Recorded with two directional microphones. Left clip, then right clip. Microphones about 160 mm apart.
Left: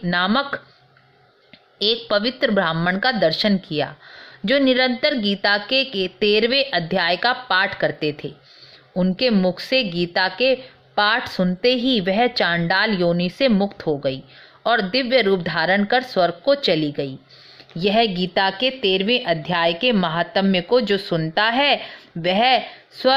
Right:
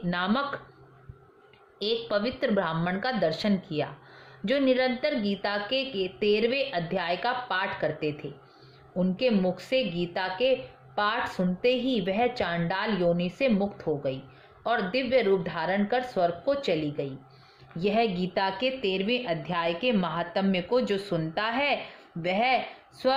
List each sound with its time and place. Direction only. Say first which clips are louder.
0.0 s speech: left 8 dB; 30° left (ahead or behind)
1.8 s speech: left 8 dB; 30° left (ahead or behind)